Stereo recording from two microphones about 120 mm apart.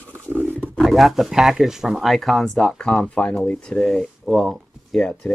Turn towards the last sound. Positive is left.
turn(degrees=0)  # may be behind; listen again after turning